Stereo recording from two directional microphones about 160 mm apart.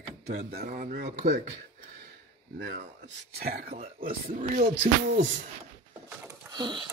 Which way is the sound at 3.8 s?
60° right (ahead or behind).